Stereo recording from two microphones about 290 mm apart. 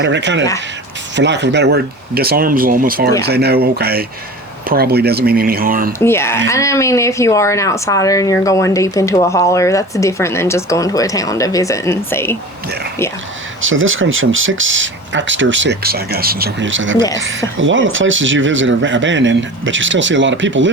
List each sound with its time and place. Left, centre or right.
0.0 s speech: right
6.0 s speech: centre
13.6 s speech: right